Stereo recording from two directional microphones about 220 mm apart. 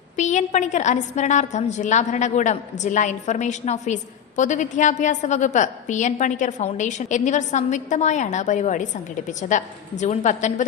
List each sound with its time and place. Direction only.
0.2 s a woman's voice: 35° left (ahead or behind)